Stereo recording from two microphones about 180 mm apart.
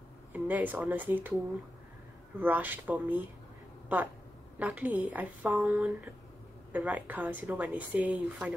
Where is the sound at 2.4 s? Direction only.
10° right (ahead or behind).